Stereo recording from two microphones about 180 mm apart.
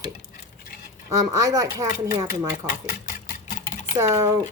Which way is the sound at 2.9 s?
50° left (ahead or behind).